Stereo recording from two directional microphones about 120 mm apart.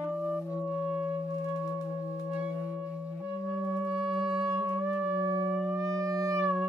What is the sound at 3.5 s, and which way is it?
Music, 10° right (ahead or behind).